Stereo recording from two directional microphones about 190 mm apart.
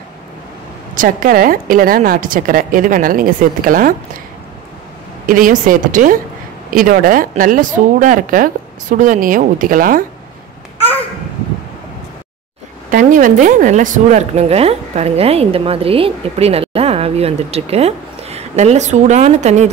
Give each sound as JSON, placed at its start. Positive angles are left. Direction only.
{"t": 0.9, "sound": "a woman's voice", "side_deg": -45}
{"t": 5.2, "sound": "a woman's voice", "side_deg": -45}
{"t": 12.9, "sound": "speech", "side_deg": -45}